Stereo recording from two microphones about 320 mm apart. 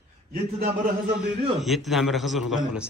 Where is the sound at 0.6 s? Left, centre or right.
Right.